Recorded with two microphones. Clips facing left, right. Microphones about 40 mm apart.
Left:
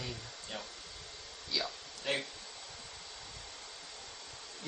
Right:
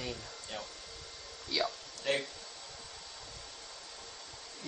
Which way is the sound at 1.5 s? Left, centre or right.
Centre.